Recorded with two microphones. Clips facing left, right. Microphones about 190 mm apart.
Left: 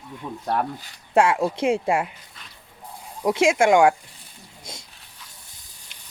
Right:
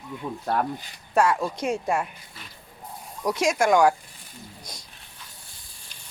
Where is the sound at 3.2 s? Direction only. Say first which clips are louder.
Left 4 dB; 25° left (ahead or behind).